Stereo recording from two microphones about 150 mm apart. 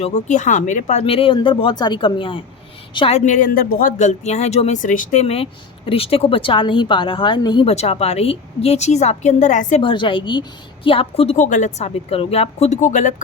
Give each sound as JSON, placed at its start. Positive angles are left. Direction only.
{"t": 0.0, "sound": "a woman's voice", "side_deg": 50}
{"t": 3.2, "sound": "speech", "side_deg": 55}
{"t": 9.8, "sound": "speech", "side_deg": 35}
{"t": 11.3, "sound": "speech", "side_deg": 60}